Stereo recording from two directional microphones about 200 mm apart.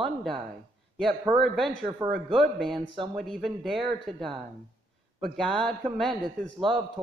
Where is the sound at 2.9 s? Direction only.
25° right (ahead or behind).